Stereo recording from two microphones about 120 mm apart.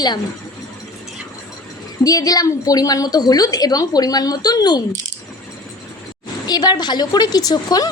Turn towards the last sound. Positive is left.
turn(degrees=35)  # may be behind; listen again after turning